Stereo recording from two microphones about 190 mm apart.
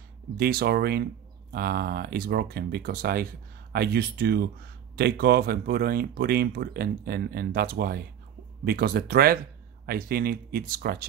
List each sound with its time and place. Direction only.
0.4 s speech: 55° right (ahead or behind)